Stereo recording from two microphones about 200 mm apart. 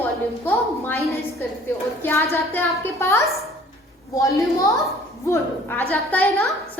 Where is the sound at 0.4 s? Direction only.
10° left (ahead or behind).